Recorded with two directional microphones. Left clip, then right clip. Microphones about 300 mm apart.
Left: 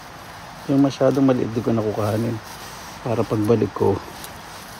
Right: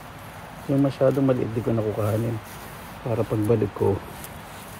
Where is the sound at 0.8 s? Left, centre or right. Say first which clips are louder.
Left 3 dB; left.